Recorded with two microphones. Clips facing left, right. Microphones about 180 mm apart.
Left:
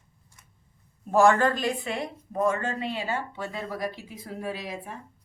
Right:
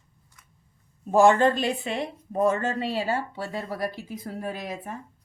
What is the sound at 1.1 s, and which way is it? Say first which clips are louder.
Speech: right 2 dB; 20° right (ahead or behind).